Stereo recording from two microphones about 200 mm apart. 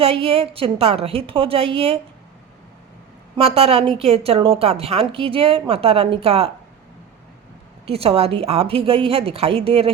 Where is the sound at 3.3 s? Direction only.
30° right (ahead or behind).